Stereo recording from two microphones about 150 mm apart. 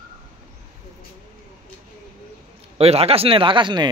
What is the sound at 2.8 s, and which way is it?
Speech, 40° right (ahead or behind).